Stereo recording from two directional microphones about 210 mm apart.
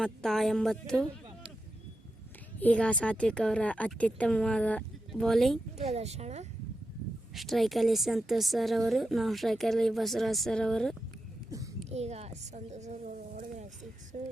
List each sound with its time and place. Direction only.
0.0 s a woman's voice: centre (ahead or behind)
2.6 s a woman's voice: 5° left (ahead or behind)
5.7 s speech: 30° right (ahead or behind)
7.3 s a woman's voice: centre (ahead or behind)
11.9 s speech: 30° right (ahead or behind)